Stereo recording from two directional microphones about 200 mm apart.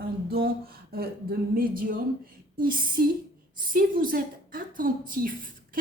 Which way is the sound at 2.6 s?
45° right (ahead or behind).